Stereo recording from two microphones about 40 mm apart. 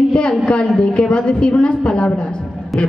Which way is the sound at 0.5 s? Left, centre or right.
Left.